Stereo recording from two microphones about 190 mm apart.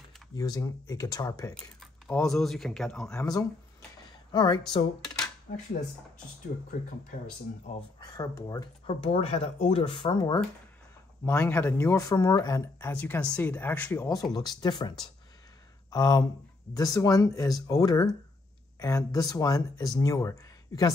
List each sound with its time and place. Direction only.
0.3 s speech: 20° left (ahead or behind)
1.5 s speech: 5° left (ahead or behind)
3.2 s speech: 20° left (ahead or behind)
5.5 s speech: 40° left (ahead or behind)
7.7 s speech: 35° left (ahead or behind)
8.0 s speech: 20° left (ahead or behind)
9.0 s speech: 30° left (ahead or behind)
11.2 s speech: 10° left (ahead or behind)
14.3 s speech: 20° left (ahead or behind)